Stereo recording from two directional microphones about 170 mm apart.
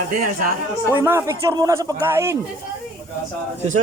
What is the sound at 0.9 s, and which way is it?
Speech, 15° right (ahead or behind).